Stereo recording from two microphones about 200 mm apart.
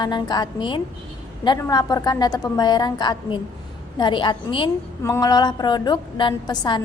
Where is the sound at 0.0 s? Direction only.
20° left (ahead or behind).